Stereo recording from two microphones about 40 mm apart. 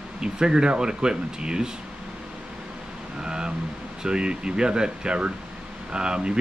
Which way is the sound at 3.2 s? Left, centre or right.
Centre.